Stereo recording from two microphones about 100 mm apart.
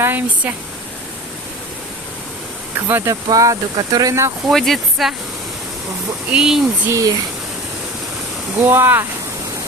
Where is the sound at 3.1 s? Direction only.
35° right (ahead or behind).